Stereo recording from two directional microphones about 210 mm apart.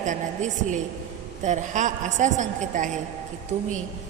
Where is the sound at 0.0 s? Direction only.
35° right (ahead or behind).